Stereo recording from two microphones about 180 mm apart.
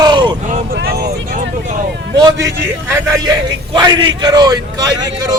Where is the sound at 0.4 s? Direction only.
45° right (ahead or behind).